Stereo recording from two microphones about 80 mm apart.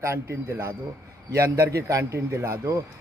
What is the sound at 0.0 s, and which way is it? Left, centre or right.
Speech, right.